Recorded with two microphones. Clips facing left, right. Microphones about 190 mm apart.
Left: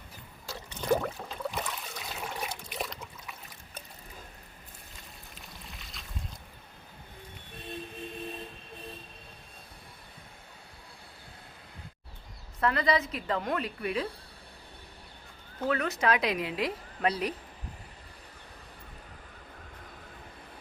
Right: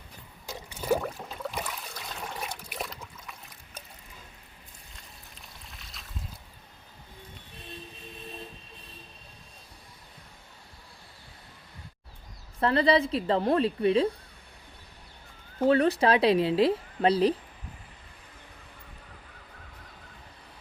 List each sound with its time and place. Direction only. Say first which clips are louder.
0.4 s water: right 1 dB; 15° right (ahead or behind)
4.9 s a sound: left 1 dB; centre (ahead or behind)
12.5 s a woman's voice: right 5 dB; 30° right (ahead or behind)
15.6 s a woman's voice: right 7 dB; 30° right (ahead or behind)